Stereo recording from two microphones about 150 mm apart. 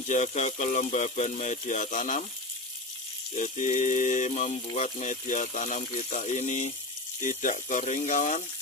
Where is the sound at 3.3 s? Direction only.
55° left (ahead or behind).